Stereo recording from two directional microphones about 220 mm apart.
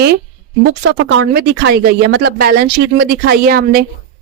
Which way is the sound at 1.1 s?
55° right (ahead or behind).